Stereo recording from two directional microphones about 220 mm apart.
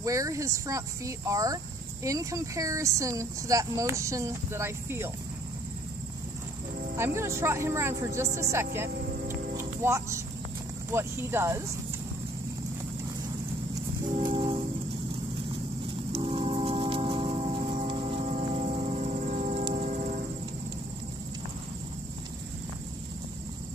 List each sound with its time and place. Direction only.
0.0 s speech: 15° right (ahead or behind)
7.0 s speech: 10° right (ahead or behind)
9.3 s music: 10° right (ahead or behind)
10.9 s speech: 10° right (ahead or behind)
14.0 s music: 25° right (ahead or behind)
16.1 s a sound: 25° right (ahead or behind)